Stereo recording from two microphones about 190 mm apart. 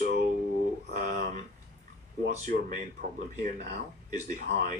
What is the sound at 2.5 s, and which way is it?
Speech, 45° right (ahead or behind).